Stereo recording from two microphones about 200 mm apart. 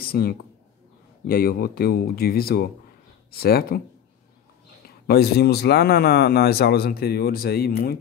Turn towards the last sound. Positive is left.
turn(degrees=50)  # may be behind; listen again after turning